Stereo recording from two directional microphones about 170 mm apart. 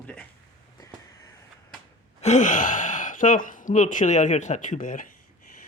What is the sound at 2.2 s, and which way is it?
Speech, 45° left (ahead or behind).